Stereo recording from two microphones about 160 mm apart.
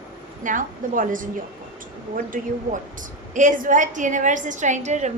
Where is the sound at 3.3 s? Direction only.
55° right (ahead or behind).